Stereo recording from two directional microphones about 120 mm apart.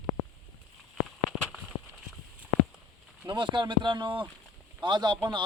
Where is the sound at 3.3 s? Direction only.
40° right (ahead or behind).